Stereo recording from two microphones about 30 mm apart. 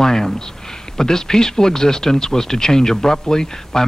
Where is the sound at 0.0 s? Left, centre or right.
Centre.